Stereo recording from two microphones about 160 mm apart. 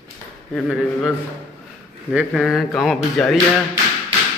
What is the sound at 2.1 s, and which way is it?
Speech, centre (ahead or behind).